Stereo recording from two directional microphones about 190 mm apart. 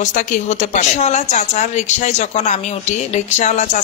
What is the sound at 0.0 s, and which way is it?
A woman's voice, 40° left (ahead or behind).